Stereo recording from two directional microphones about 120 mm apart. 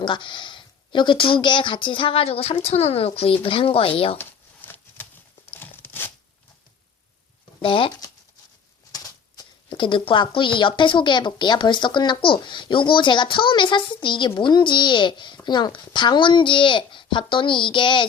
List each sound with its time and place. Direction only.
0.0 s speech: 40° left (ahead or behind)
4.2 s shuffling cards: 15° left (ahead or behind)
5.5 s tearing: 15° left (ahead or behind)
7.6 s speech: 45° left (ahead or behind)
8.9 s a sound: 30° left (ahead or behind)
9.6 s speech: 45° left (ahead or behind)